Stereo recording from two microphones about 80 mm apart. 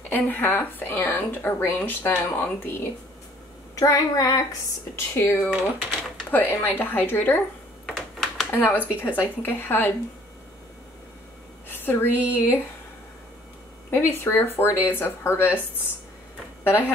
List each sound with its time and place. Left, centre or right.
0.1 s speech: left
3.7 s speech: left
5.5 s typing: centre
6.3 s speech: left
7.8 s computer keyboard: centre
8.5 s speech: left
11.7 s a sound: left
13.8 s speech: left